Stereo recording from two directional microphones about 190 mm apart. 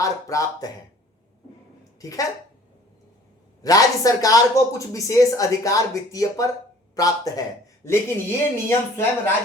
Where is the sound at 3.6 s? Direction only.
20° left (ahead or behind).